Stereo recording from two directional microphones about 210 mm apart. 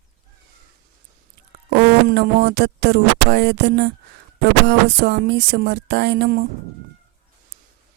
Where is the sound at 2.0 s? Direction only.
50° right (ahead or behind).